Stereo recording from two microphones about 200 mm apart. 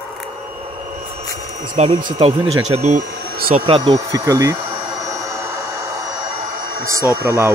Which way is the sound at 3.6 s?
25° right (ahead or behind).